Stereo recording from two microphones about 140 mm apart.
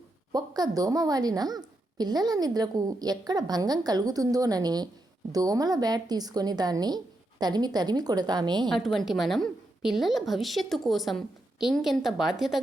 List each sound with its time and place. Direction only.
0.3 s a woman's voice: 30° right (ahead or behind)
8.7 s a woman's voice: centre (ahead or behind)